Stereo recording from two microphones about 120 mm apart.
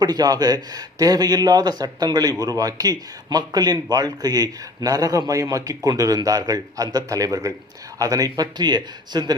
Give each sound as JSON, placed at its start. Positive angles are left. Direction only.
{"t": 0.0, "sound": "speech", "side_deg": -35}